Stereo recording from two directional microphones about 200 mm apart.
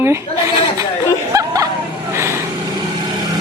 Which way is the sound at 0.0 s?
15° right (ahead or behind).